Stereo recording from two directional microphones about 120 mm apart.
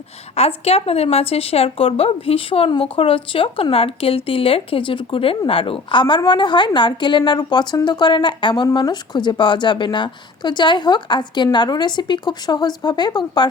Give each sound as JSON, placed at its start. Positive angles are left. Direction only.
{"t": 0.3, "sound": "a woman's voice", "side_deg": 60}